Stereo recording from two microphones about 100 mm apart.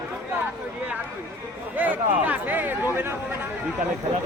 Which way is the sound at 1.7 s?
15° right (ahead or behind).